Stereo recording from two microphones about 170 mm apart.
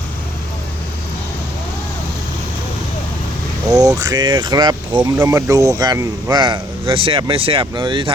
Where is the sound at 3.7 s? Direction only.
20° right (ahead or behind).